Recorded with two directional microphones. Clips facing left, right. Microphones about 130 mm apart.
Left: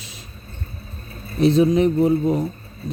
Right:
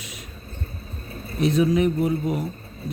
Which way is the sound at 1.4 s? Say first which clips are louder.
Left 4 dB; 30° left (ahead or behind).